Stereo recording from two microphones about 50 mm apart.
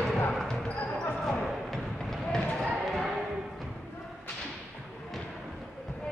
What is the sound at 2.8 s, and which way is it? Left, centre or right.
Music, centre.